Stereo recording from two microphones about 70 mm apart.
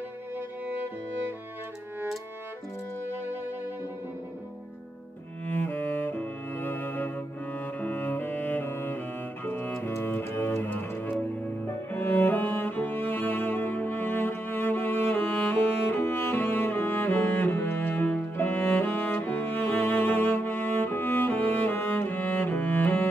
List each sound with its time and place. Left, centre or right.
5.5 s cello: left
9.8 s double bass: left
11.6 s cello: left